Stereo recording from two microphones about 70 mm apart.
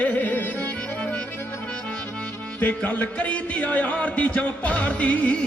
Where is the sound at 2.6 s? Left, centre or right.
Left.